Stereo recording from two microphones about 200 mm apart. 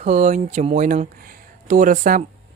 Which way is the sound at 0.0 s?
35° right (ahead or behind).